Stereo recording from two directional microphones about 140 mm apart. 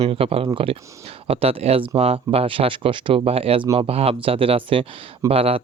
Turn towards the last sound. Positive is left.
turn(degrees=-45)  # may be behind; listen again after turning